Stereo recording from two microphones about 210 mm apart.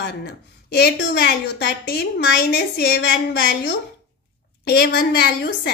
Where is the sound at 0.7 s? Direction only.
50° left (ahead or behind).